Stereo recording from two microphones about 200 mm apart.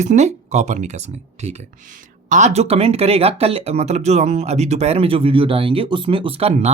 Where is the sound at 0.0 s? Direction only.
35° right (ahead or behind).